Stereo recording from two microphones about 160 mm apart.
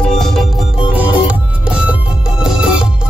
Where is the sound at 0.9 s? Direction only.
10° right (ahead or behind).